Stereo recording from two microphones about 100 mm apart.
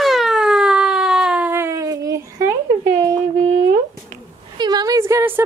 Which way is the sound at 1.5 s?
30° right (ahead or behind).